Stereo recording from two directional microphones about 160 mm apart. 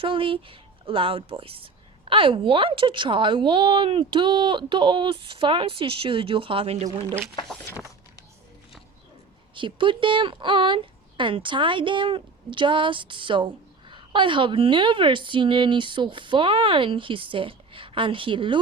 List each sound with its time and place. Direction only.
0.0 s speech: 35° right (ahead or behind)
9.6 s speech: 30° right (ahead or behind)